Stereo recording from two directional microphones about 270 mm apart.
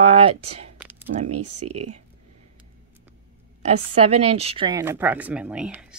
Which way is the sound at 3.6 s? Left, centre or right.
Right.